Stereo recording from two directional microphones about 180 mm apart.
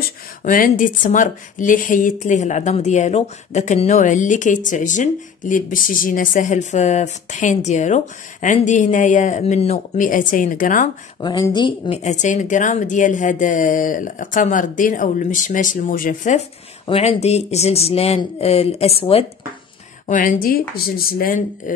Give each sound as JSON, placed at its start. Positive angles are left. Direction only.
{"t": 0.4, "sound": "speech", "side_deg": 45}
{"t": 11.1, "sound": "speech", "side_deg": 25}
{"t": 12.0, "sound": "speech", "side_deg": 40}
{"t": 16.8, "sound": "speech", "side_deg": 30}
{"t": 20.1, "sound": "speech", "side_deg": 50}